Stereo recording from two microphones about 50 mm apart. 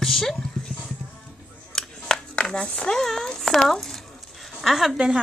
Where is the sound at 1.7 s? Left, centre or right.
Centre.